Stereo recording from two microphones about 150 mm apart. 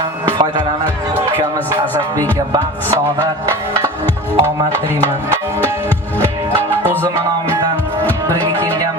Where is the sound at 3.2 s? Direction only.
20° right (ahead or behind).